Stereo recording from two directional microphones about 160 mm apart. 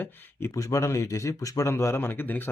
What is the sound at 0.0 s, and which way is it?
Speech, 10° left (ahead or behind).